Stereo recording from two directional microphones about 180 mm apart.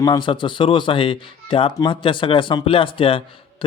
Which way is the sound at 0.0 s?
25° left (ahead or behind).